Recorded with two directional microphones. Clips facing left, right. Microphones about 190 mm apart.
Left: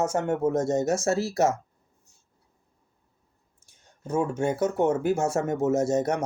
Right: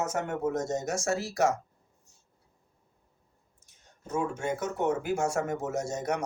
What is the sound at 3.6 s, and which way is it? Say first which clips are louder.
Speech: left 7 dB; 30° left (ahead or behind).